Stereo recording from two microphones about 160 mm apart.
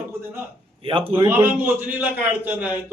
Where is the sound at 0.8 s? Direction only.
35° right (ahead or behind).